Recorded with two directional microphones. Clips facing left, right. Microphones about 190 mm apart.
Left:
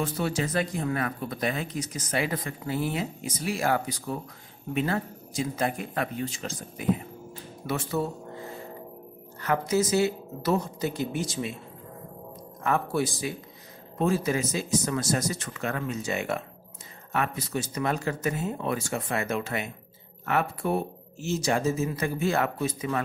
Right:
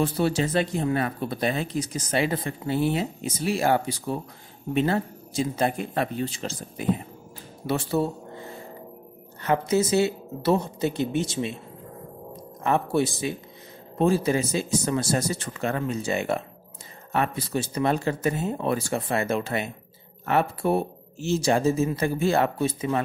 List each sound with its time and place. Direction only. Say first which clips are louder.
0.0 s speech: right 5 dB; 30° right (ahead or behind)
9.4 s speech: right 3 dB; 25° right (ahead or behind)
12.6 s speech: right 3 dB; 25° right (ahead or behind)